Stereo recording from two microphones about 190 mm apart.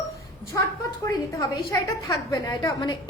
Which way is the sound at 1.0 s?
15° left (ahead or behind).